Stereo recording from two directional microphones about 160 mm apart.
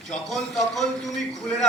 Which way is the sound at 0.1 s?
Centre (ahead or behind).